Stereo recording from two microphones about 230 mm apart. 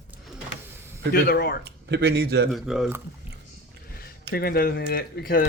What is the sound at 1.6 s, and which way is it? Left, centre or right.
Speech, right.